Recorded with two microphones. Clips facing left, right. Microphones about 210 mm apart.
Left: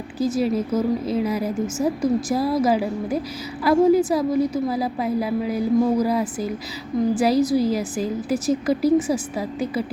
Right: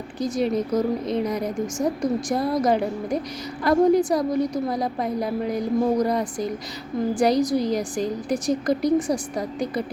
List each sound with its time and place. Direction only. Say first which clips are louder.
0.2 s a woman's voice: left 2 dB; 5° left (ahead or behind)